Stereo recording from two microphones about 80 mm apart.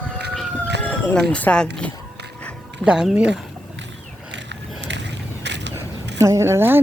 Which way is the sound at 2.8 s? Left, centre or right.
Centre.